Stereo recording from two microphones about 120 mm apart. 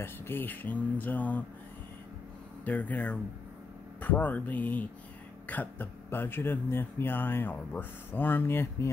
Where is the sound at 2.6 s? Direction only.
15° left (ahead or behind).